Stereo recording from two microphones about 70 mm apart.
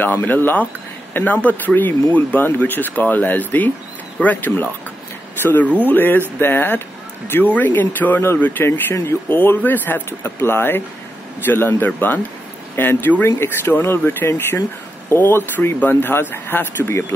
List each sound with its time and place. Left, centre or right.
0.0 s speech: left